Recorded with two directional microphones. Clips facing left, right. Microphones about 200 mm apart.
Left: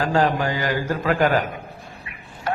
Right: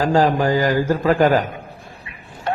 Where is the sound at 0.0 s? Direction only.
35° right (ahead or behind).